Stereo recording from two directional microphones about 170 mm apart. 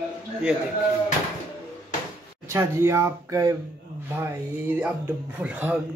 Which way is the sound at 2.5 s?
15° right (ahead or behind).